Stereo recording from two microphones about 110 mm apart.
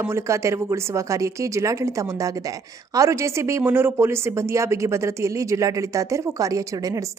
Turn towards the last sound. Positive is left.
turn(degrees=-30)  # may be behind; listen again after turning